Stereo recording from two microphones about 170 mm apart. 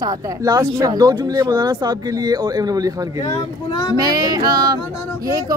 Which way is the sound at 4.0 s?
20° right (ahead or behind).